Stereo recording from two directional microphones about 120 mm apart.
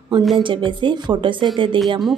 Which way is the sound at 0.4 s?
45° right (ahead or behind).